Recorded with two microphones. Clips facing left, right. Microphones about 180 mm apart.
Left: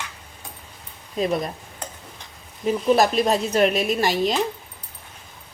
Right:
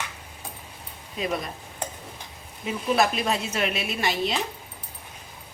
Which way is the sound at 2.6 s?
40° left (ahead or behind).